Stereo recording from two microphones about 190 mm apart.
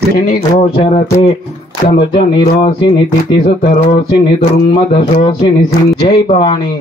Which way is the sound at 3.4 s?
40° left (ahead or behind).